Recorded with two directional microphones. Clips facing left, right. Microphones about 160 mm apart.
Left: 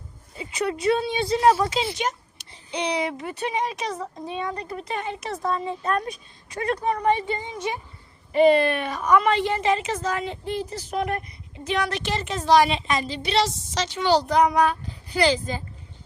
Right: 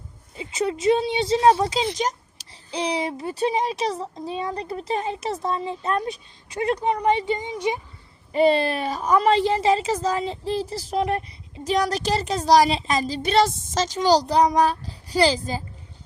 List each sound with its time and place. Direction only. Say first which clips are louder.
0.3 s a child's voice: right 1 dB; 25° right (ahead or behind)
8.3 s a child's voice: left 2 dB; 30° right (ahead or behind)